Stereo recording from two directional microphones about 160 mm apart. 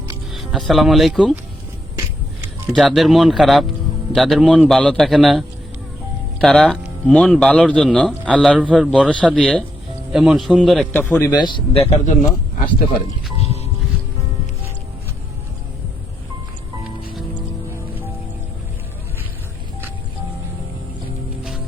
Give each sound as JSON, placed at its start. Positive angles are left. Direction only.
{"t": 0.3, "sound": "speech", "side_deg": 0}
{"t": 2.6, "sound": "a man's voice", "side_deg": 0}
{"t": 8.5, "sound": "speech", "side_deg": -5}
{"t": 8.9, "sound": "a man's voice", "side_deg": 5}
{"t": 11.0, "sound": "a man's voice", "side_deg": 10}
{"t": 11.3, "sound": "a man's voice", "side_deg": 25}